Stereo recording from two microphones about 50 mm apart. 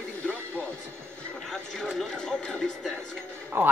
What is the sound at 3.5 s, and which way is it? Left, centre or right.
Speech, right.